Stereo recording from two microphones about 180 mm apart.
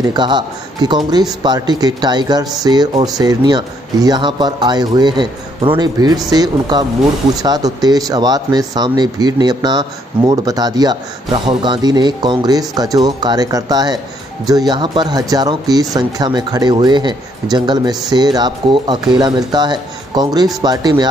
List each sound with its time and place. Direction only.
0.1 s speech: 25° right (ahead or behind)